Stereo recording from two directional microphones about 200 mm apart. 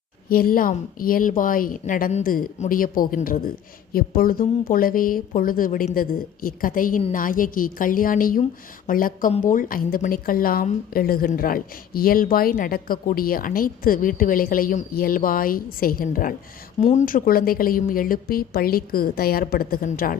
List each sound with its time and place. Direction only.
0.3 s a woman's voice: 45° left (ahead or behind)